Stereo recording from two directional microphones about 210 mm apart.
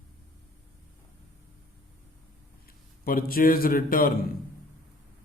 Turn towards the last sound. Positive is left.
turn(degrees=45)  # may be behind; listen again after turning